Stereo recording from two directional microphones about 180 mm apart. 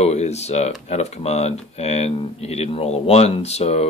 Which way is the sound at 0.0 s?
35° left (ahead or behind).